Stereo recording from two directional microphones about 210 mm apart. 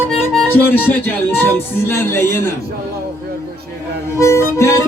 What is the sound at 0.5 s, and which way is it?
Speech, 10° left (ahead or behind).